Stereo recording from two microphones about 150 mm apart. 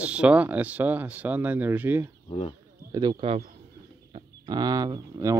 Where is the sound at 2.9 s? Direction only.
25° right (ahead or behind).